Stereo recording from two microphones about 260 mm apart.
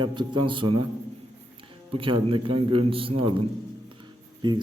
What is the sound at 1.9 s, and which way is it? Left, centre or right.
Speech, centre.